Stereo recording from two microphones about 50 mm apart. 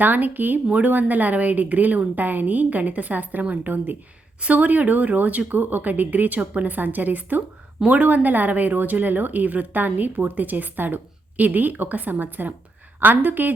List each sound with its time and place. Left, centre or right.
0.0 s a woman's voice: right